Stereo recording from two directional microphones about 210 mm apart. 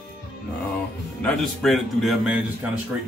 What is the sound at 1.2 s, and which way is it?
A man's voice, centre (ahead or behind).